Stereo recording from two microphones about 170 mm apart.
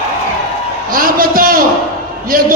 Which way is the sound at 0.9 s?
55° right (ahead or behind).